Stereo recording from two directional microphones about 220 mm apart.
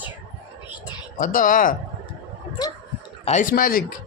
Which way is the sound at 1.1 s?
35° left (ahead or behind).